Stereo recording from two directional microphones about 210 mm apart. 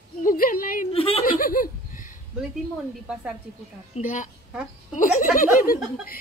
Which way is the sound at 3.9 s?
35° left (ahead or behind).